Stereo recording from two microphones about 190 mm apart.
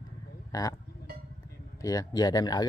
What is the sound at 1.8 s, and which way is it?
Speech, 20° left (ahead or behind).